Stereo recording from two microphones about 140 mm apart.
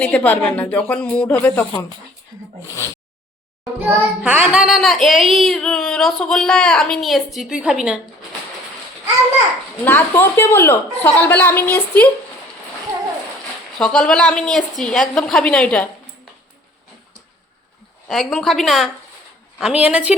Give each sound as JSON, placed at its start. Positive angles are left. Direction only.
{"t": 0.0, "sound": "a woman's voice", "side_deg": 10}
{"t": 2.6, "sound": "a sound", "side_deg": 20}
{"t": 3.8, "sound": "child singing", "side_deg": -10}
{"t": 9.8, "sound": "a woman's voice", "side_deg": 15}
{"t": 13.7, "sound": "child singing", "side_deg": 5}
{"t": 15.2, "sound": "a woman's voice", "side_deg": 5}
{"t": 18.1, "sound": "child singing", "side_deg": 0}
{"t": 19.5, "sound": "a woman's voice", "side_deg": -5}